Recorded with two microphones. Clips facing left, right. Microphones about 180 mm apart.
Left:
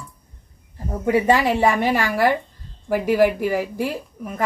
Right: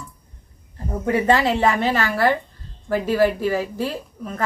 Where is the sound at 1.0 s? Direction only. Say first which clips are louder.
Left 1 dB; 10° left (ahead or behind).